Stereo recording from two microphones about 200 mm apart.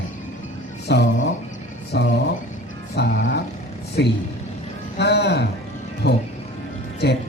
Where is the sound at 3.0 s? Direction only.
55° left (ahead or behind).